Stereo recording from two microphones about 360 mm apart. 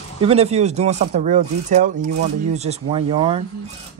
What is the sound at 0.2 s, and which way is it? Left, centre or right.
Speech, centre.